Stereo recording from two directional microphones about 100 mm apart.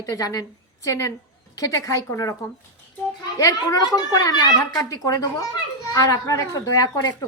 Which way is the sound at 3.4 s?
35° left (ahead or behind).